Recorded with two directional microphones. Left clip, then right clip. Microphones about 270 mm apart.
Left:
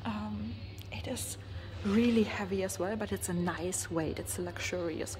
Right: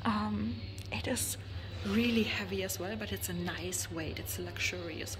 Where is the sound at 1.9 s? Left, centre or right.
Centre.